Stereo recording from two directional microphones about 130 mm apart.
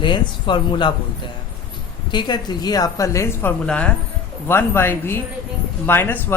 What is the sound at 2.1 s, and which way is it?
Speech, 35° left (ahead or behind).